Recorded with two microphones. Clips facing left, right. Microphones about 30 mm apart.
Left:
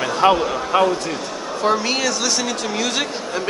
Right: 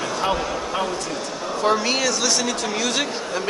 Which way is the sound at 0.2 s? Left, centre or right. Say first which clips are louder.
Left 9 dB; left.